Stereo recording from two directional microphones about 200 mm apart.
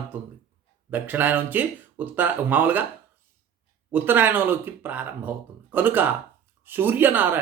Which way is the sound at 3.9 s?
10° right (ahead or behind).